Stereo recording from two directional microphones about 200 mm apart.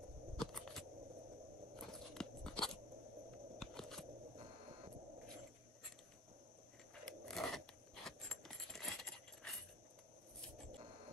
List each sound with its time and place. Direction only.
0.4 s a sound: centre (ahead or behind)
1.8 s crunch: centre (ahead or behind)
3.5 s scissors: centre (ahead or behind)
4.4 s printer: 30° right (ahead or behind)
7.1 s coin: centre (ahead or behind)